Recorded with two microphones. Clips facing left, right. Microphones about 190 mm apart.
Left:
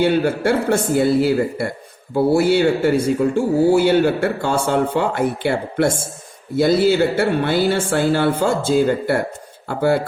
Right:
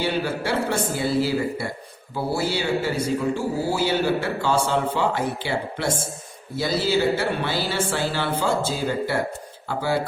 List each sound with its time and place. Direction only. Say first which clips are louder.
0.0 s a man's voice: left 8 dB; 50° left (ahead or behind)